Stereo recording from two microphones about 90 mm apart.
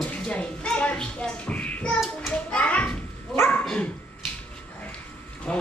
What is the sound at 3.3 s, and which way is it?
Dog, 25° left (ahead or behind).